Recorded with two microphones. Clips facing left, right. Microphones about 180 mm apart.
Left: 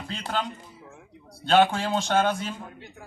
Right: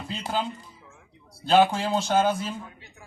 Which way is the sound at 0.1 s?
10° right (ahead or behind).